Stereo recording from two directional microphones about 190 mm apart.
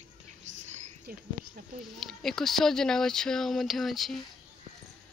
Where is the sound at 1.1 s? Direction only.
50° right (ahead or behind).